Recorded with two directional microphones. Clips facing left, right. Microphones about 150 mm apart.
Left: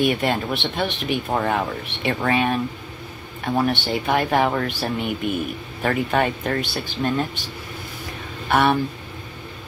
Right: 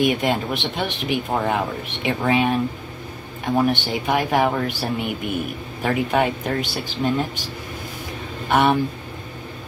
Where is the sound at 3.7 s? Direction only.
15° right (ahead or behind).